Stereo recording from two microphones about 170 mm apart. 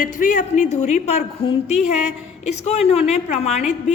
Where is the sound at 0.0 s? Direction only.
50° left (ahead or behind).